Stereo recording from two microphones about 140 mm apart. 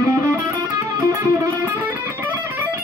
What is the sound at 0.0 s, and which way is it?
Music, 20° right (ahead or behind).